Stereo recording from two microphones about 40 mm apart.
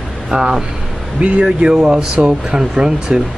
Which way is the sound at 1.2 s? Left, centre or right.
Right.